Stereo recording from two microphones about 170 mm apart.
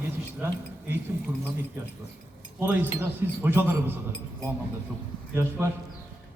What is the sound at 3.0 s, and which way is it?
A man's voice, 10° right (ahead or behind).